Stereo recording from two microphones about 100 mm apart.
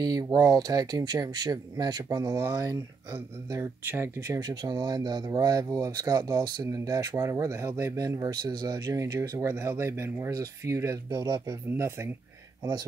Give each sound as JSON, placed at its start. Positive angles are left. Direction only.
{"t": 0.0, "sound": "speech", "side_deg": -40}
{"t": 4.4, "sound": "speech", "side_deg": -45}
{"t": 11.7, "sound": "speech", "side_deg": -30}